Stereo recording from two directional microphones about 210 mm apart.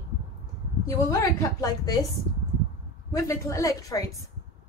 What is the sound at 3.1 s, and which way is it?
Speech, 15° left (ahead or behind).